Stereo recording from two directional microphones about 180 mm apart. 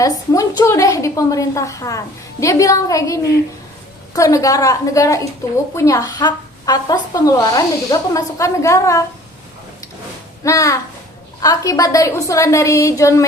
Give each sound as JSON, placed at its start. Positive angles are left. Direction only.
{"t": 0.0, "sound": "a woman's voice", "side_deg": 20}
{"t": 10.4, "sound": "a woman's voice", "side_deg": 15}